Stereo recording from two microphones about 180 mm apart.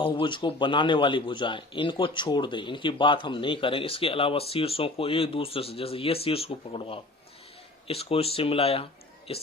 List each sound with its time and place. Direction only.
0.0 s a man's voice: 30° left (ahead or behind)